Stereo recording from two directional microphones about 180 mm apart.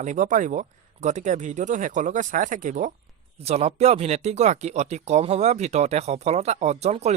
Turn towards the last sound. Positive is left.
turn(degrees=-35)  # may be behind; listen again after turning